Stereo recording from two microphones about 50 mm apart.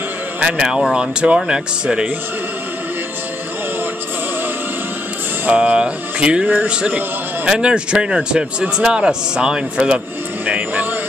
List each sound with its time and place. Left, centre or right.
0.4 s a man's voice: centre
5.6 s speech: centre
7.4 s a man's voice: centre
10.4 s speech: right